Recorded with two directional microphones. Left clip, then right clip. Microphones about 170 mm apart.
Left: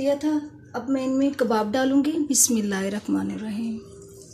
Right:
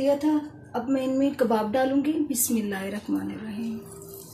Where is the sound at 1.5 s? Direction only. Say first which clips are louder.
Left 2 dB; 45° left (ahead or behind).